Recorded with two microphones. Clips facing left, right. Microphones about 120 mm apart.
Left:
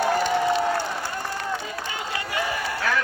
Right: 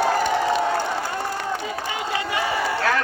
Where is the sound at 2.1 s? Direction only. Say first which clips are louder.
Right 4 dB; 25° right (ahead or behind).